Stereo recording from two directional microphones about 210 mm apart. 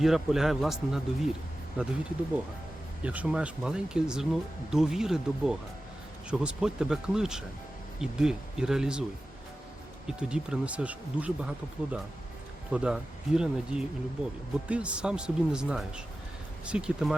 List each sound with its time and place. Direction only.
0.0 s speech: centre (ahead or behind)
3.0 s speech: 5° right (ahead or behind)
10.1 s speech: 5° right (ahead or behind)